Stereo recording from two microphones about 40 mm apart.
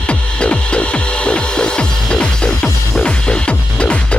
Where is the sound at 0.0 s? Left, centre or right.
Left.